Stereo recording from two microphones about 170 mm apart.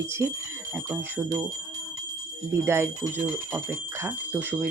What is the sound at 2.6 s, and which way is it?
Speech, 15° right (ahead or behind).